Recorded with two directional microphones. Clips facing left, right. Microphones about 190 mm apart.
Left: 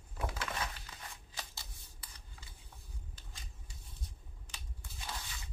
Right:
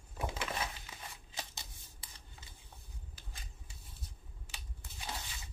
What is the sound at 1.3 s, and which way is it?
Shuffling cards, 20° right (ahead or behind).